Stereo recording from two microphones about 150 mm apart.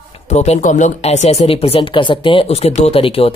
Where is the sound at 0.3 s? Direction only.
50° left (ahead or behind).